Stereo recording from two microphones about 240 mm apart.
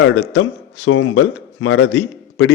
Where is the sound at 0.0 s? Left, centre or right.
Left.